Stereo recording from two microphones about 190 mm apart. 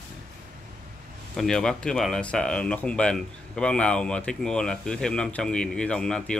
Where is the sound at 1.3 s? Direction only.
5° left (ahead or behind).